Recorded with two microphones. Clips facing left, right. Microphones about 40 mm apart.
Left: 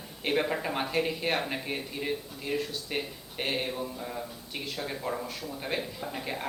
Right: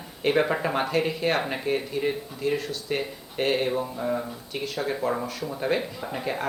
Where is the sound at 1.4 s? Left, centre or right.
Centre.